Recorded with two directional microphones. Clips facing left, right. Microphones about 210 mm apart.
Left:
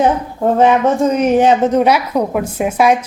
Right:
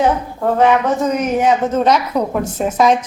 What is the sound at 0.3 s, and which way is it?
Speech, 20° left (ahead or behind).